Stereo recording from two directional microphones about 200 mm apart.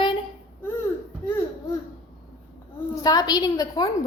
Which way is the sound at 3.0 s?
20° left (ahead or behind).